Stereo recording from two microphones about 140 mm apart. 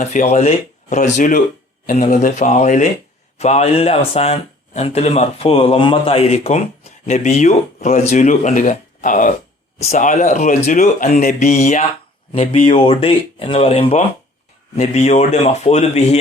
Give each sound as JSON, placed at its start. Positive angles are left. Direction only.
{"t": 0.0, "sound": "speech", "side_deg": 55}
{"t": 1.9, "sound": "speech", "side_deg": 55}
{"t": 9.7, "sound": "speech", "side_deg": 50}
{"t": 12.3, "sound": "speech", "side_deg": 45}
{"t": 14.8, "sound": "speech", "side_deg": 55}